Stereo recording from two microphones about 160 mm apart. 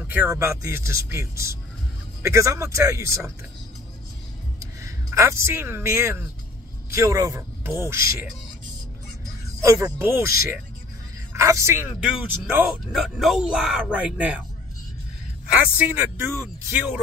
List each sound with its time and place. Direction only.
0.0 s speech: 10° right (ahead or behind)
4.6 s speech: 20° right (ahead or behind)
9.6 s speech: 20° right (ahead or behind)
11.3 s speech: 20° right (ahead or behind)
11.9 s speech: 5° right (ahead or behind)
12.9 s speech: centre (ahead or behind)
15.5 s speech: 10° right (ahead or behind)